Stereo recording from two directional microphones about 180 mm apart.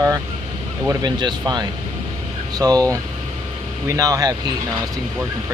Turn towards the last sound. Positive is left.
turn(degrees=-20)  # may be behind; listen again after turning